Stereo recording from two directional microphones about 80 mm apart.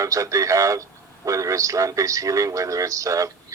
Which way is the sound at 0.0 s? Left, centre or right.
Right.